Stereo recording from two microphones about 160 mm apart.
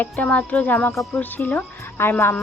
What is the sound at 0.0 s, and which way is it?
Speech, 10° left (ahead or behind).